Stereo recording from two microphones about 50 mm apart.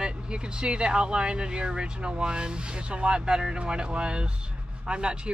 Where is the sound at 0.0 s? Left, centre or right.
Centre.